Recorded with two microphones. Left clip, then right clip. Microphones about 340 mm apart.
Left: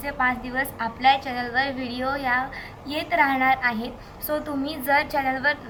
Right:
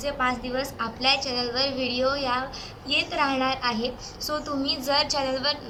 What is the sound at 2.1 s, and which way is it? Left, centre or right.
A woman's voice, centre.